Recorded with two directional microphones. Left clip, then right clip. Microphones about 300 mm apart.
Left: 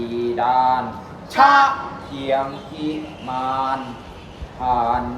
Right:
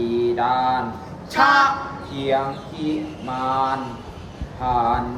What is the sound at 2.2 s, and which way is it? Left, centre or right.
Mantra, centre.